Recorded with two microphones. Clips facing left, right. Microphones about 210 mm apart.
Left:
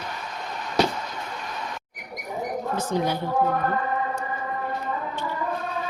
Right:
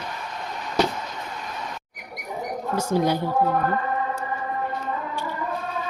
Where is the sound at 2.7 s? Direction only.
10° right (ahead or behind).